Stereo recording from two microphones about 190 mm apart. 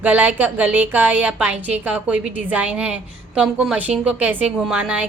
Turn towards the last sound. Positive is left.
turn(degrees=-5)  # may be behind; listen again after turning